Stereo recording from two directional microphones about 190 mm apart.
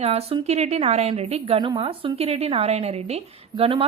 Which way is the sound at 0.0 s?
35° right (ahead or behind).